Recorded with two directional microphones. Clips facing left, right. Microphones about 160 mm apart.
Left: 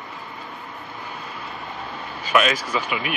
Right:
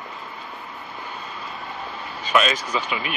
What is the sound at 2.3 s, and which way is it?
Speech, 5° left (ahead or behind).